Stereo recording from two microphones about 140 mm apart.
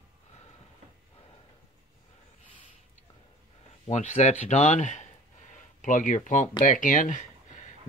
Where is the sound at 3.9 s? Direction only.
55° left (ahead or behind).